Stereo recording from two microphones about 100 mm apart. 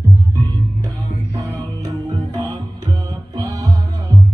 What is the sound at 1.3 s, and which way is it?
Music, 35° right (ahead or behind).